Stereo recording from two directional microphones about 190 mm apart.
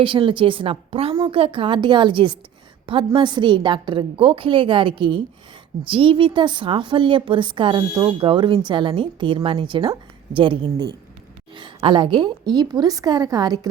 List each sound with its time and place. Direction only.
0.0 s a woman's voice: 25° right (ahead or behind)